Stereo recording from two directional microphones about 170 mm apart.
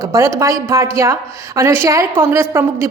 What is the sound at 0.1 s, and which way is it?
A woman's voice, 15° right (ahead or behind).